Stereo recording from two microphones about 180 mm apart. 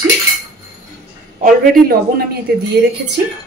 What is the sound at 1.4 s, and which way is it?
Speech, 60° right (ahead or behind).